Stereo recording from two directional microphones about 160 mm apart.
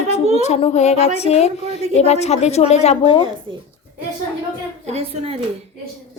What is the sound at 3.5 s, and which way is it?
Speech, 30° right (ahead or behind).